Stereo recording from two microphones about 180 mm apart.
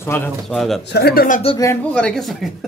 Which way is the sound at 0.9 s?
60° left (ahead or behind).